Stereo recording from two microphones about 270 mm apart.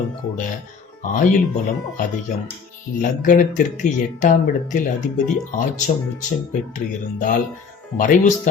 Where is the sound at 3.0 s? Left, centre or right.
Left.